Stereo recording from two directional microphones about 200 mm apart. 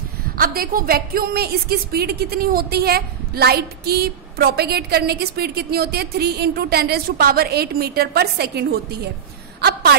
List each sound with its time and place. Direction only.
0.4 s a woman's voice: 45° right (ahead or behind)